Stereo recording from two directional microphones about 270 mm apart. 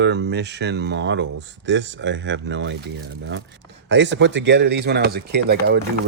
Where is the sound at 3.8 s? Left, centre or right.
Right.